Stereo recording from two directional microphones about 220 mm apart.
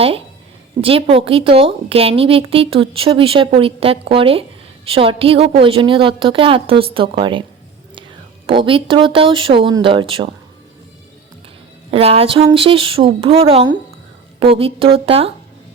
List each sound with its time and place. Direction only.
0.8 s a woman's voice: 25° right (ahead or behind)
8.4 s a woman's voice: 25° right (ahead or behind)
11.9 s a woman's voice: 25° right (ahead or behind)